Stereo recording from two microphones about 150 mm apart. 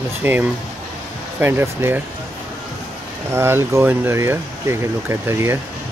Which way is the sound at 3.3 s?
15° right (ahead or behind).